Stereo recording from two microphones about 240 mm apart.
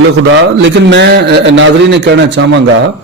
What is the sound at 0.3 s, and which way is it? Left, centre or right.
A man's voice, right.